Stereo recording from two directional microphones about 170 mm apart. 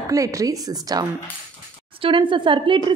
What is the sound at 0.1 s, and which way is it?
Speech, 20° right (ahead or behind).